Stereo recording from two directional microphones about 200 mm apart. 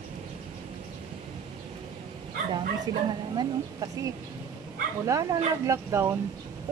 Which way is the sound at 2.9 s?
20° right (ahead or behind).